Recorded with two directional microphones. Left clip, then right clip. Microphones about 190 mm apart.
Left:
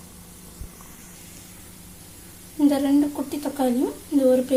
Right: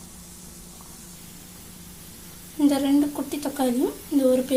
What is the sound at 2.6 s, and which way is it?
A woman's voice, centre (ahead or behind).